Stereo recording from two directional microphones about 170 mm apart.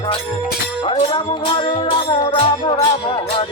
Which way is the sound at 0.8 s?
35° left (ahead or behind).